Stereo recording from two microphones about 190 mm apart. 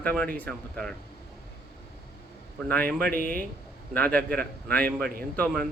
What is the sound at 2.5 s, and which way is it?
Speech, 10° left (ahead or behind).